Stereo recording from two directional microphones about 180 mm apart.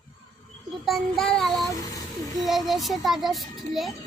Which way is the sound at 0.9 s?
Centre (ahead or behind).